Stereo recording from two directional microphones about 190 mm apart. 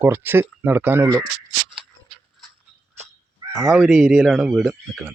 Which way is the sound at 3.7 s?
Centre (ahead or behind).